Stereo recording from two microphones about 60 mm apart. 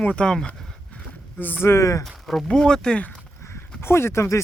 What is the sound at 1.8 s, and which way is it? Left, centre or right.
Speech, left.